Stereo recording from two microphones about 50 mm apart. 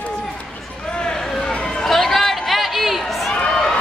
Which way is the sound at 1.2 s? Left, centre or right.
Left.